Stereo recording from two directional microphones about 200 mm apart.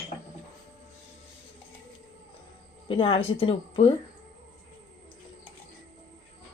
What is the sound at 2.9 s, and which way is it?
A woman's voice, 25° left (ahead or behind).